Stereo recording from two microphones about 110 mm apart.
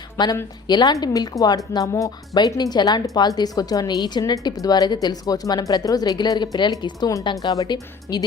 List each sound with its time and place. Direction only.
0.2 s speech: 40° left (ahead or behind)